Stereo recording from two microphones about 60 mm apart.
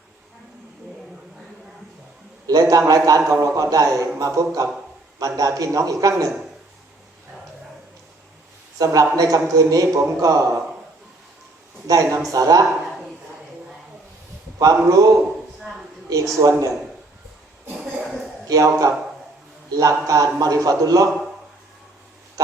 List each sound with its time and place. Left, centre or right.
2.5 s a man's voice: right
5.2 s a man's voice: right
8.8 s a man's voice: right
11.9 s a man's voice: right
12.3 s a man's voice: right
14.6 s a man's voice: right
16.0 s a man's voice: right
18.4 s a man's voice: right